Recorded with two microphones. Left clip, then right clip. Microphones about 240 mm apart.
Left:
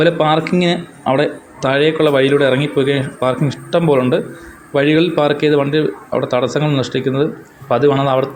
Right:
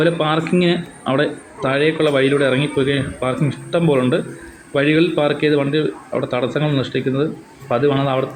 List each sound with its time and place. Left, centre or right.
0.0 s a man's voice: centre